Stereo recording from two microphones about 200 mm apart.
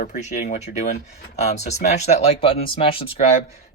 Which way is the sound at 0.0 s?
40° left (ahead or behind).